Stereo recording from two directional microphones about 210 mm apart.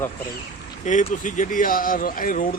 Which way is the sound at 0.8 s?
35° left (ahead or behind).